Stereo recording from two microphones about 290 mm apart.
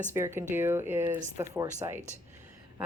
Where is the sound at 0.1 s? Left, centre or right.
Centre.